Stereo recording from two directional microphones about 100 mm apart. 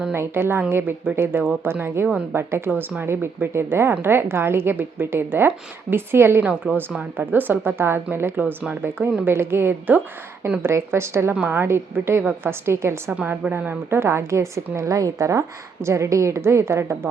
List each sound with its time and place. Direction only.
0.1 s a woman's voice: 25° right (ahead or behind)
6.5 s a woman's voice: 10° right (ahead or behind)